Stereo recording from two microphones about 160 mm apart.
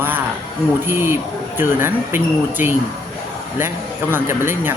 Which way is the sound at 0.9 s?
15° right (ahead or behind).